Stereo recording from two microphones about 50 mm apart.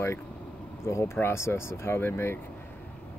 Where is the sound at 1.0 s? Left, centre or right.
Left.